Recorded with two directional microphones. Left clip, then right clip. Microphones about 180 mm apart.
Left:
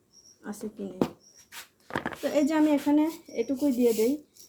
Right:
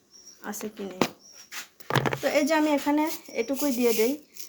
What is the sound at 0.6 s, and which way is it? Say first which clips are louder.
Speech: right 2 dB; 10° right (ahead or behind).